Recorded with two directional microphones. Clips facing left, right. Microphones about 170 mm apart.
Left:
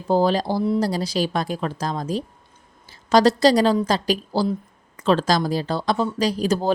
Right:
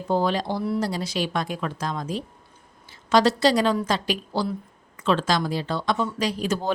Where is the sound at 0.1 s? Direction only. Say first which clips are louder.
Left 4 dB; 35° left (ahead or behind).